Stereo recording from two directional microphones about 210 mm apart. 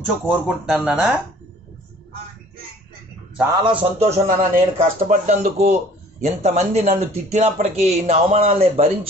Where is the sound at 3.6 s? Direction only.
25° right (ahead or behind).